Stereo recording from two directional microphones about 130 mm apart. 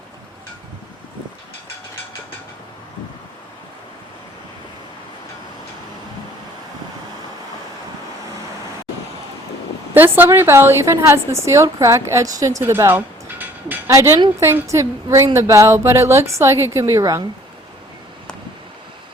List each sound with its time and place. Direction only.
9.9 s a woman's voice: 15° right (ahead or behind)